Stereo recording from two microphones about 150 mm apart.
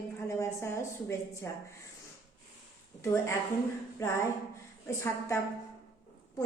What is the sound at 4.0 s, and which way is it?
A woman's voice, 20° left (ahead or behind).